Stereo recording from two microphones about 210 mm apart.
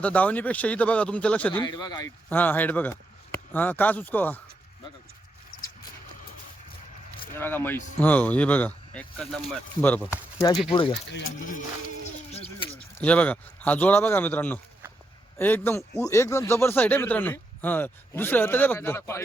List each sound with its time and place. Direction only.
0.0 s speech: 5° left (ahead or behind)
1.6 s speech: 20° left (ahead or behind)
2.3 s a man's voice: 10° left (ahead or behind)
7.3 s speech: 10° left (ahead or behind)
11.1 s speech: 75° left (ahead or behind)
12.3 s a sound: 30° left (ahead or behind)
13.0 s speech: 5° left (ahead or behind)